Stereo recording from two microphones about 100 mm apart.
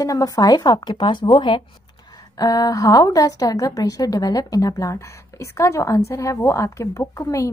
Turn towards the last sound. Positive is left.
turn(degrees=30)  # may be behind; listen again after turning